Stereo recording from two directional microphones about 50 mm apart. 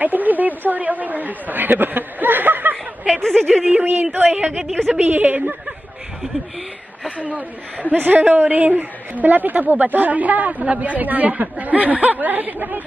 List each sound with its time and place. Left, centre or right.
0.0 s a woman's voice: right
3.1 s speech: centre
3.8 s a woman's voice: right
4.2 s speech: right
4.9 s a woman's voice: right
7.2 s a woman's voice: right